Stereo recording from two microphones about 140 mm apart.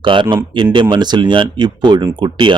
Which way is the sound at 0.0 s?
35° right (ahead or behind).